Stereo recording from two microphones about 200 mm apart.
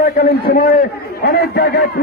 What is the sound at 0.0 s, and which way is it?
A man's voice, 50° left (ahead or behind).